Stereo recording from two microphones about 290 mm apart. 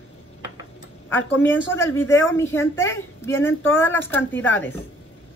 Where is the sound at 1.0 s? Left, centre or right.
Centre.